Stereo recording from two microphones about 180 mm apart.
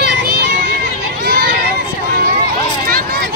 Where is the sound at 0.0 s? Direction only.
75° right (ahead or behind).